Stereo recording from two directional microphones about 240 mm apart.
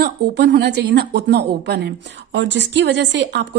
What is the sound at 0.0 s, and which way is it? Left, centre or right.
A woman's voice, right.